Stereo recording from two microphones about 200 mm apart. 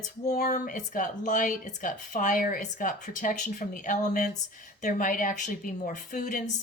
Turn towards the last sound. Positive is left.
turn(degrees=40)  # may be behind; listen again after turning